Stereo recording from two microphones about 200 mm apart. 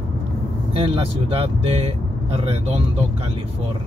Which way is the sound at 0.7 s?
25° right (ahead or behind).